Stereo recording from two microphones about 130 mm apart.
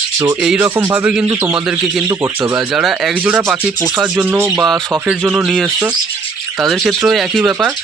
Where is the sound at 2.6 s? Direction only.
Centre (ahead or behind).